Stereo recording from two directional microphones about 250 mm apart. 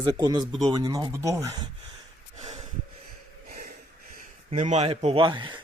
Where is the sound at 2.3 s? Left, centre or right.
Right.